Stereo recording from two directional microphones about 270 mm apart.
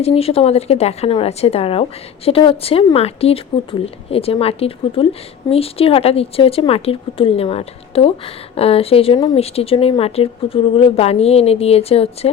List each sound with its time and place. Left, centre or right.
0.0 s speech: left